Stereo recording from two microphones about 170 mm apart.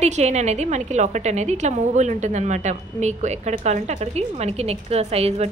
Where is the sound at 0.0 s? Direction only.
40° right (ahead or behind).